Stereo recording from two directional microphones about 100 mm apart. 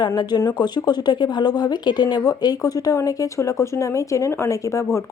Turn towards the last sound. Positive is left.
turn(degrees=30)  # may be behind; listen again after turning